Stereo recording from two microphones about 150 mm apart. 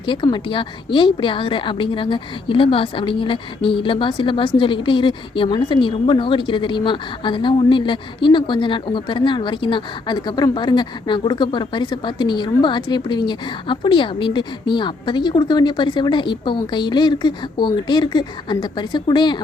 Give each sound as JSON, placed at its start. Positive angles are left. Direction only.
{"t": 0.0, "sound": "a woman's voice", "side_deg": 30}